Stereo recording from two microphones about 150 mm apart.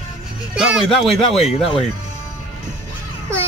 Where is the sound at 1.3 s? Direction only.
45° left (ahead or behind).